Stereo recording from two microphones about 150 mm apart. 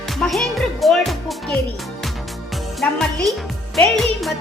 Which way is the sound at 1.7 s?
Centre (ahead or behind).